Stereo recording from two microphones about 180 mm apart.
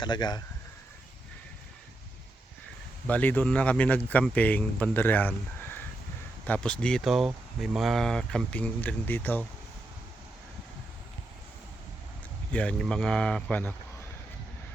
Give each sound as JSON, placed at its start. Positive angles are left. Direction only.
{"t": 0.0, "sound": "speech", "side_deg": 25}
{"t": 3.1, "sound": "speech", "side_deg": 10}
{"t": 12.5, "sound": "speech", "side_deg": 5}